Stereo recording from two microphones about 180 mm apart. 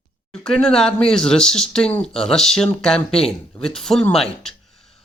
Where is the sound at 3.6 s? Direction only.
5° left (ahead or behind).